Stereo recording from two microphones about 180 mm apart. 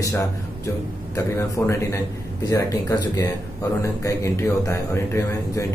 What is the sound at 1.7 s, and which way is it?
Speech, 15° left (ahead or behind).